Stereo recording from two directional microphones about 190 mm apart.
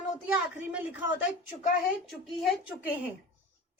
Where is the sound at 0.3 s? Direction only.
5° right (ahead or behind).